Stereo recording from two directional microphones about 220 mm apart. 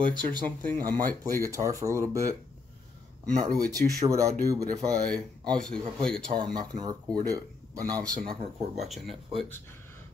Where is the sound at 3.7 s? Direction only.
15° right (ahead or behind).